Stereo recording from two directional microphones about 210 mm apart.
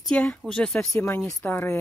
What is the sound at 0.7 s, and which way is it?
Speech, 15° left (ahead or behind).